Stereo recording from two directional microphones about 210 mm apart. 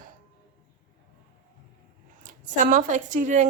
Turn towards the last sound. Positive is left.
turn(degrees=-35)  # may be behind; listen again after turning